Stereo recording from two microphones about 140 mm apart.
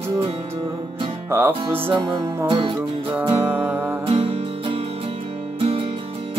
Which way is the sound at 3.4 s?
10° right (ahead or behind).